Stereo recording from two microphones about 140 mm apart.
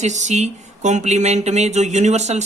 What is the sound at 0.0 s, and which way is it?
Speech, 55° right (ahead or behind).